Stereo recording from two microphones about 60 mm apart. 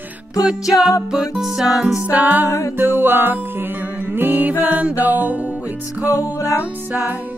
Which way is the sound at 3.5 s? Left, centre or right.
Right.